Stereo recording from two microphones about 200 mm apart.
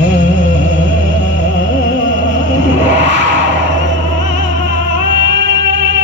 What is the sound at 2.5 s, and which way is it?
Music, 65° right (ahead or behind).